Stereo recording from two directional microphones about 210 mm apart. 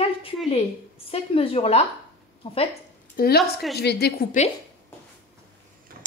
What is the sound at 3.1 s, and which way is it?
A woman's voice, 50° left (ahead or behind).